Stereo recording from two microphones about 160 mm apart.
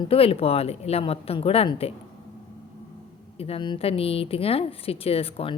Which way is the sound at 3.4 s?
35° left (ahead or behind).